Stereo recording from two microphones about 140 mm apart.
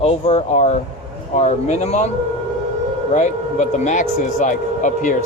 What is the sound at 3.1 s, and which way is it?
Speech, 55° left (ahead or behind).